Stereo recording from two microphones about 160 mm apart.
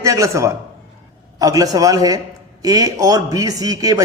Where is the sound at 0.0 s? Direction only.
20° right (ahead or behind).